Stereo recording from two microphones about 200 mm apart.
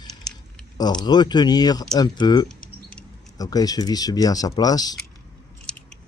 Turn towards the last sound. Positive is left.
turn(degrees=20)  # may be behind; listen again after turning